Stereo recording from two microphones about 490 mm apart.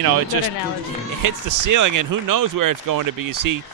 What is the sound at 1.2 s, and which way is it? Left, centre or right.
Speech, right.